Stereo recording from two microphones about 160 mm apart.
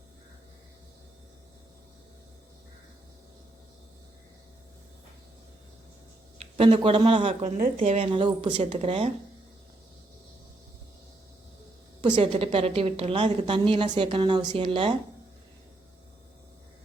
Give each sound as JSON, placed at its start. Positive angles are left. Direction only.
{"t": 6.4, "sound": "a man's voice", "side_deg": -35}
{"t": 12.0, "sound": "a woman's voice", "side_deg": -30}